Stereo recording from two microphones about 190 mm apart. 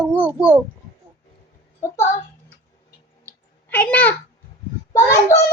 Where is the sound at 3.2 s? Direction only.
10° left (ahead or behind).